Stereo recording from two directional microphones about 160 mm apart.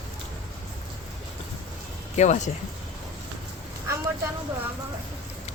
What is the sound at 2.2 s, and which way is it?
Speech, 50° left (ahead or behind).